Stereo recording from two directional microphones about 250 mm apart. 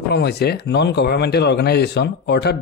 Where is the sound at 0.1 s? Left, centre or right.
Left.